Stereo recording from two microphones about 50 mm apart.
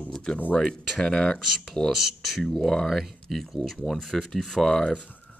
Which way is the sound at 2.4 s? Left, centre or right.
Centre.